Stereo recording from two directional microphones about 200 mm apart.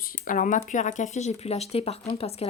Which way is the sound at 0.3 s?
40° left (ahead or behind).